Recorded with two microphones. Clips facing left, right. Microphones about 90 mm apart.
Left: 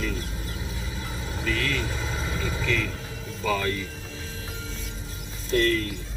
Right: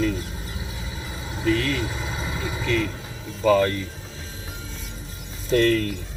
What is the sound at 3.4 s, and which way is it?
Speech, 35° right (ahead or behind).